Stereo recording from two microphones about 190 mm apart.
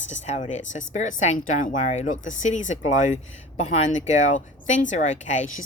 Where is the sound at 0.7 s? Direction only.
40° left (ahead or behind).